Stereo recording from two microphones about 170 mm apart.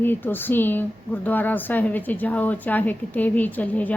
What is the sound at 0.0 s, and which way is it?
Speech, 10° left (ahead or behind).